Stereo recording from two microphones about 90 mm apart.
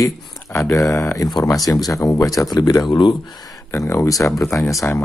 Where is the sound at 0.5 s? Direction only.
25° left (ahead or behind).